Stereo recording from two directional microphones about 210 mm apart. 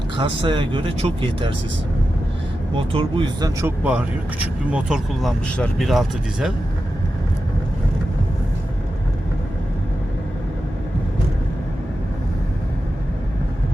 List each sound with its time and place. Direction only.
0.2 s speech: 25° right (ahead or behind)
2.7 s speech: 25° right (ahead or behind)
3.6 s speech: 5° right (ahead or behind)